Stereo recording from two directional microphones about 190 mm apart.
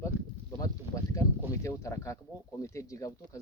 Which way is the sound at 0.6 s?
15° left (ahead or behind).